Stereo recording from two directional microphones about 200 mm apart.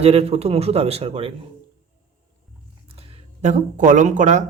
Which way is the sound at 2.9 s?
35° right (ahead or behind).